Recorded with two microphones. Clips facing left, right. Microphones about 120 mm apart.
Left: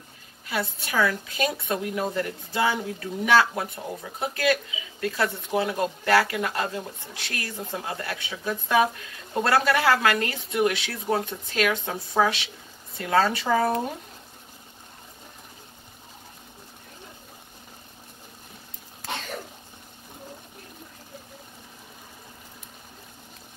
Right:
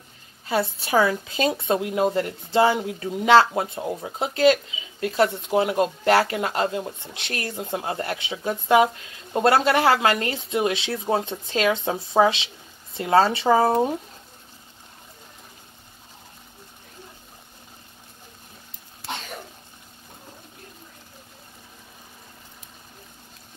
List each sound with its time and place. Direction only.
0.5 s speech: 30° right (ahead or behind)